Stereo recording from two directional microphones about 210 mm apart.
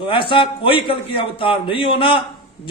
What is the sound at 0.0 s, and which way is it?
A man's voice, 25° left (ahead or behind).